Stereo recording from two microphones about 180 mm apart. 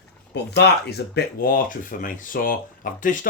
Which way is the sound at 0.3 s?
70° left (ahead or behind).